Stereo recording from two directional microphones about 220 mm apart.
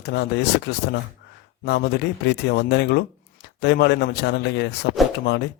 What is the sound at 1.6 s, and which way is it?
Speech, 50° left (ahead or behind).